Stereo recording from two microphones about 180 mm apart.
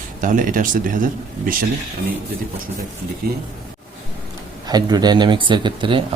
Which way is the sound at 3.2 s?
55° right (ahead or behind).